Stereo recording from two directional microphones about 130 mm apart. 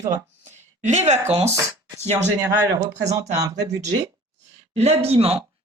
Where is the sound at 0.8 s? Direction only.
60° right (ahead or behind).